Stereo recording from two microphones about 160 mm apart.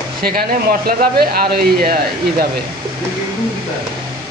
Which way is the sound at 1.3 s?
70° right (ahead or behind).